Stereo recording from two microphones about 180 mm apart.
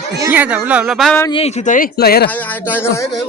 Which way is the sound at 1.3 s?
35° left (ahead or behind).